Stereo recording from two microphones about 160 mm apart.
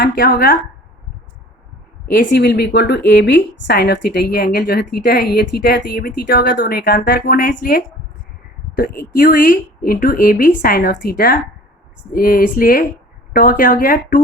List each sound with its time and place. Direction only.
0.0 s speech: 65° left (ahead or behind)
2.1 s a woman's voice: 85° left; by 14.2 s 55° left (ahead or behind)